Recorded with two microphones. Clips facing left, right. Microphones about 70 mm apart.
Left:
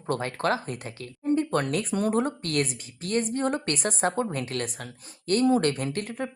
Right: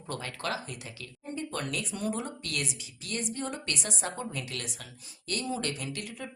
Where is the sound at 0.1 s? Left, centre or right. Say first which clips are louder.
Left 8 dB; left.